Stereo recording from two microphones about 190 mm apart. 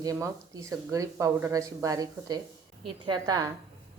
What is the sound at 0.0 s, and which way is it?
A woman's voice, 20° right (ahead or behind).